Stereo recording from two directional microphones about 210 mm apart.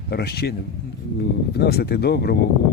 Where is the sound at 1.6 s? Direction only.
50° left (ahead or behind).